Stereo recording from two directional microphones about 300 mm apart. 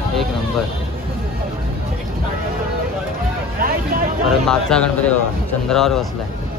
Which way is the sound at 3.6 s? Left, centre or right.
Right.